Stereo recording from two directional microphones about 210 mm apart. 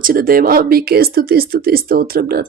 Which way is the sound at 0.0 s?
45° right (ahead or behind).